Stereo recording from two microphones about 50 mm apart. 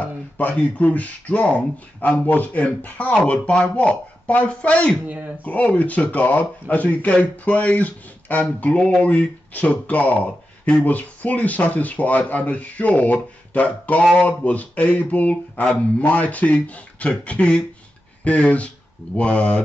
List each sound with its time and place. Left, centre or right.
0.0 s speech: left
3.3 s speech: centre
5.0 s speech: right
5.4 s speech: left
8.7 s speech: left